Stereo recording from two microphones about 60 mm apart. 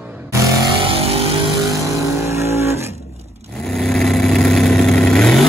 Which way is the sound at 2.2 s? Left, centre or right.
Right.